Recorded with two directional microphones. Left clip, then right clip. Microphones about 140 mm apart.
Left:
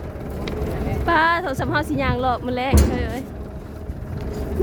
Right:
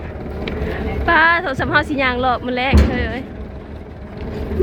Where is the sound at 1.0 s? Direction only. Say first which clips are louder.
Right 5 dB; 20° left (ahead or behind).